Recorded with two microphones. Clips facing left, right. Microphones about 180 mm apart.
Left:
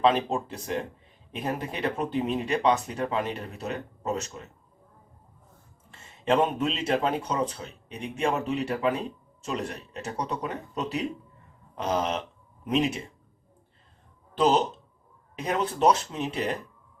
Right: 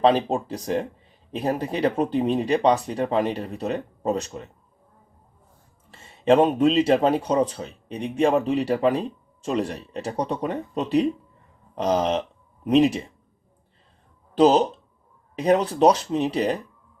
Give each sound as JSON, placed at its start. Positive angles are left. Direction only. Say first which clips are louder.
{"t": 0.0, "sound": "speech", "louder": "right 4 dB", "side_deg": -35}
{"t": 6.2, "sound": "speech", "louder": "right 7 dB", "side_deg": -35}
{"t": 14.3, "sound": "speech", "louder": "right 6 dB", "side_deg": -35}